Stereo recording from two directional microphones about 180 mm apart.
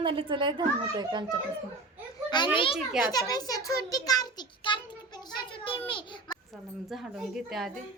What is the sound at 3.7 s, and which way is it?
Child singing, 20° left (ahead or behind).